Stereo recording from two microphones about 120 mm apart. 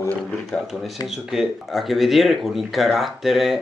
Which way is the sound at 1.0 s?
5° right (ahead or behind).